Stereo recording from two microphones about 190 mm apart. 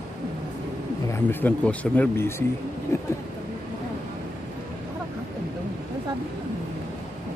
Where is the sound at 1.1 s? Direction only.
10° left (ahead or behind).